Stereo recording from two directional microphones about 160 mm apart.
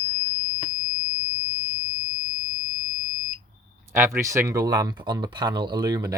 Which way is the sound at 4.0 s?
15° right (ahead or behind).